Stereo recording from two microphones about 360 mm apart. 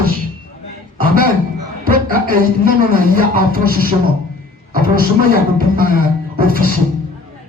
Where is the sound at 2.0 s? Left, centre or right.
Right.